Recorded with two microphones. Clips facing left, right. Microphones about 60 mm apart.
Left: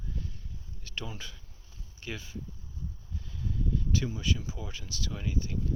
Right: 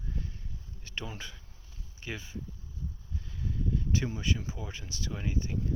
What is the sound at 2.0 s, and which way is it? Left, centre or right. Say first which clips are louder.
Speech: even; centre.